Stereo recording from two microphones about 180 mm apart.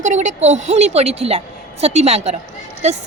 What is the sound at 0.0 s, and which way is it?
A woman's voice, 40° right (ahead or behind).